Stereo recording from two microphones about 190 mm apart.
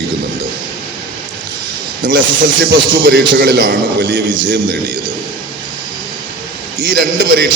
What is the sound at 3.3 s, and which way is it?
Speech, 55° right (ahead or behind).